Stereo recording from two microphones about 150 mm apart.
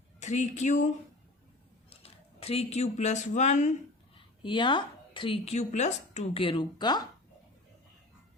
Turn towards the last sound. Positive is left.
turn(degrees=30)  # may be behind; listen again after turning